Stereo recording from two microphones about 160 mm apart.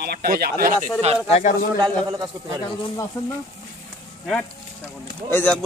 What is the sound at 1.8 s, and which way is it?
Speech, 25° right (ahead or behind).